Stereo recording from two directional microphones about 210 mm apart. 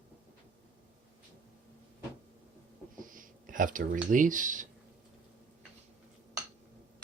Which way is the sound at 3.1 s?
40° right (ahead or behind).